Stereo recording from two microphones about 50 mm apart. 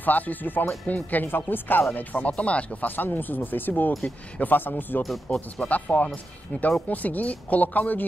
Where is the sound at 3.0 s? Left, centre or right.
Left.